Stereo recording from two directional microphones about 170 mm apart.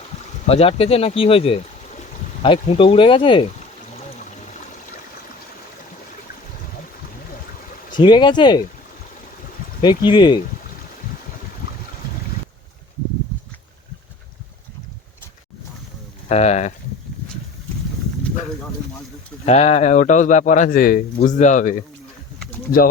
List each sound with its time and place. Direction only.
0.4 s speech: 35° left (ahead or behind)
7.9 s speech: 25° left (ahead or behind)
9.8 s speech: 25° left (ahead or behind)
16.3 s speech: 40° left (ahead or behind)
19.5 s a man's voice: 40° left (ahead or behind)